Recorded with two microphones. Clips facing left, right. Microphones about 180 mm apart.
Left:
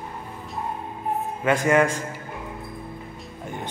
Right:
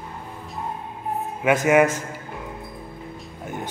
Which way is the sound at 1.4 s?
10° right (ahead or behind).